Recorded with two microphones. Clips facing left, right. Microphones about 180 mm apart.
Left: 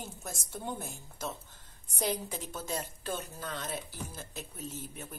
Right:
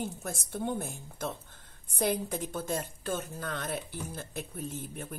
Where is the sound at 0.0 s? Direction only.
55° right (ahead or behind).